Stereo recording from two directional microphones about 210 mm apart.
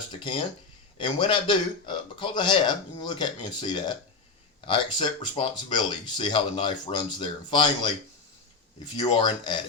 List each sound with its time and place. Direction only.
0.1 s speech: 20° left (ahead or behind)